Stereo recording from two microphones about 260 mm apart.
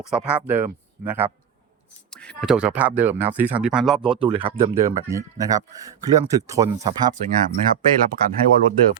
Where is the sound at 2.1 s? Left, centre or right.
Centre.